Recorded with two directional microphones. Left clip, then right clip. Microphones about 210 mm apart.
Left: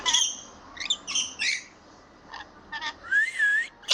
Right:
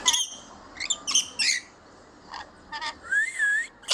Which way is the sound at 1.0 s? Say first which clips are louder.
Right 7 dB; 20° right (ahead or behind).